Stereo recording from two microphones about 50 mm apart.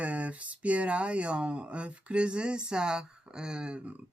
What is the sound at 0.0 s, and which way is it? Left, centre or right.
Speech, right.